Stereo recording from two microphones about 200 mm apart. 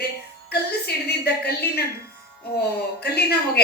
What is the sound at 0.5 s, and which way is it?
Speech, 50° left (ahead or behind).